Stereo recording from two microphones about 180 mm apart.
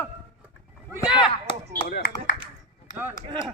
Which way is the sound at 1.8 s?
70° left (ahead or behind).